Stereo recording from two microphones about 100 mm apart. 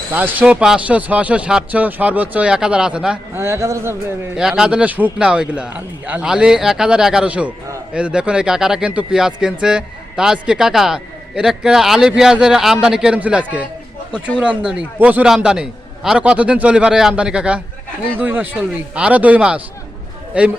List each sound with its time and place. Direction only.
0.1 s a man's voice: 15° right (ahead or behind)
3.3 s speech: 25° right (ahead or behind)
4.4 s a man's voice: 5° right (ahead or behind)